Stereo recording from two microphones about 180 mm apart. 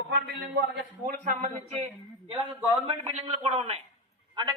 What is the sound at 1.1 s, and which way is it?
Speech, 45° right (ahead or behind).